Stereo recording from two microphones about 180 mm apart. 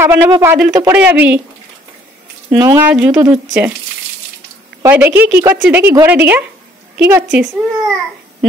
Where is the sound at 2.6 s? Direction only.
15° right (ahead or behind).